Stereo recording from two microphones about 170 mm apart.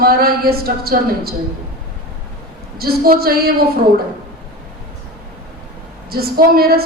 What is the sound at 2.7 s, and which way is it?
Speech, 60° right (ahead or behind).